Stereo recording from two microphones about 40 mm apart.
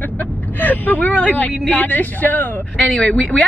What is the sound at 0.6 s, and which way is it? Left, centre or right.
Speech, left.